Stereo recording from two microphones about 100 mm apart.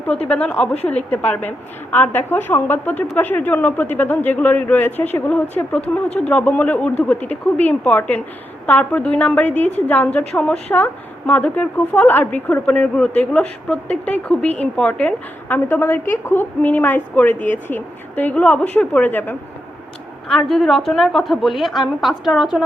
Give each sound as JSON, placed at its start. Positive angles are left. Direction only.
{"t": 0.3, "sound": "a woman's voice", "side_deg": 10}
{"t": 20.2, "sound": "a woman's voice", "side_deg": 5}